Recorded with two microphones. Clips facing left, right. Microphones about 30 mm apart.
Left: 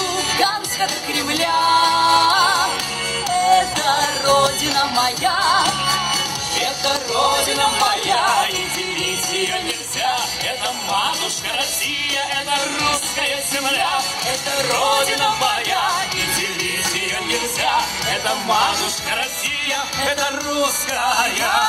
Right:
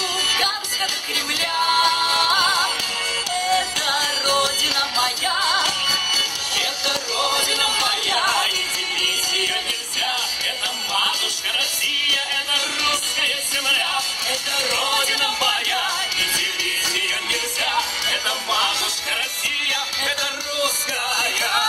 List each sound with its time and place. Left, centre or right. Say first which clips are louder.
0.3 s music: left 2 dB; centre
7.5 s music: left 3 dB; centre
10.9 s music: left 1 dB; centre
17.3 s music: left 3 dB; centre
19.7 s speech: left 2 dB; right
21.0 s music: left 4 dB; centre